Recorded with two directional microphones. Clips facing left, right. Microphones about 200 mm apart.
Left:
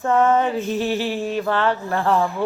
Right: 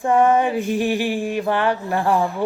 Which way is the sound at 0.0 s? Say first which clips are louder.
Right 1 dB; 15° right (ahead or behind).